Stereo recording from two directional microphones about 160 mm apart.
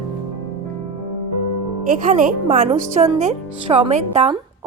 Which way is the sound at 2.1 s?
45° right (ahead or behind).